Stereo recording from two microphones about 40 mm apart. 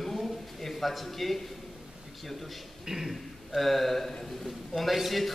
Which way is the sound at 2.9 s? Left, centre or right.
Centre.